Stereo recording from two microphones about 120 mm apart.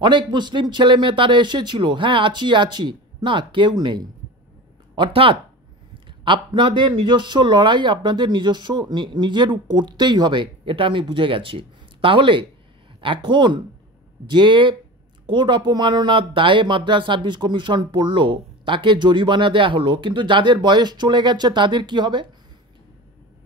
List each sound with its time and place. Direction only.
0.0 s speech: 40° right (ahead or behind)